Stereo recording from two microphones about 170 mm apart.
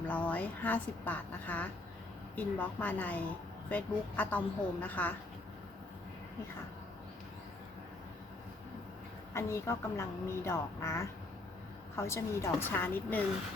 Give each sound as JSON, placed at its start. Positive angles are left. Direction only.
{"t": 0.1, "sound": "a woman's voice", "side_deg": 10}
{"t": 9.3, "sound": "a woman's voice", "side_deg": 15}